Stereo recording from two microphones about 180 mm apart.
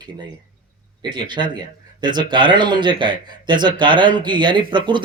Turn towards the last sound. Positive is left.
turn(degrees=-25)  # may be behind; listen again after turning